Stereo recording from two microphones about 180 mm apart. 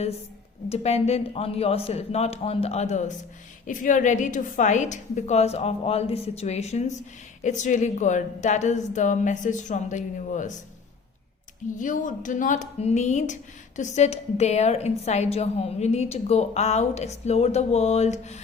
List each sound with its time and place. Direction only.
0.7 s a woman's voice: 35° left (ahead or behind)
11.8 s a woman's voice: 45° left (ahead or behind)